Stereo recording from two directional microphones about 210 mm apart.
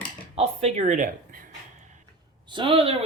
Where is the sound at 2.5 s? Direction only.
25° right (ahead or behind).